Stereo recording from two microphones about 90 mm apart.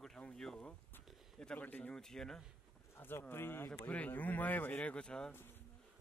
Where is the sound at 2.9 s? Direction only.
25° left (ahead or behind).